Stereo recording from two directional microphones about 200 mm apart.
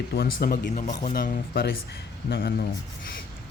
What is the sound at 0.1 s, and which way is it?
Speech, 50° left (ahead or behind).